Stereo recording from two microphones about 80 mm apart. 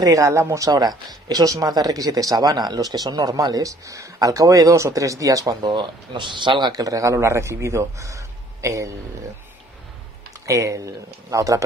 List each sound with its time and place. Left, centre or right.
0.0 s speech: right
0.7 s speech: right
5.6 s speech: right
6.7 s speech: right
10.4 s speech: right